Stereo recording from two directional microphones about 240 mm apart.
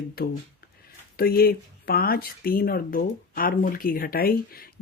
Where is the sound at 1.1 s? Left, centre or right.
Left.